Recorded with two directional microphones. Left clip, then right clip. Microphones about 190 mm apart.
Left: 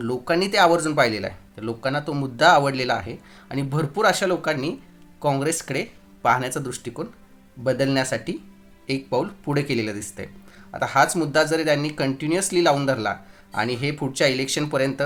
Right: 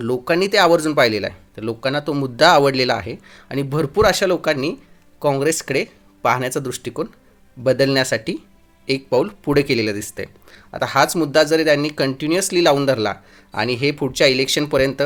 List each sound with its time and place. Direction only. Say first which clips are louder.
0.0 s speech: right 4 dB; 25° right (ahead or behind)